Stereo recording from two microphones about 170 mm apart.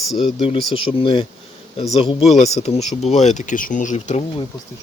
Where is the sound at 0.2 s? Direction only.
35° left (ahead or behind).